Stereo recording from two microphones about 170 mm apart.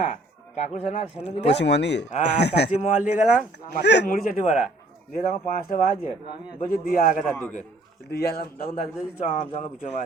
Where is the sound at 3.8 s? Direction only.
90° left.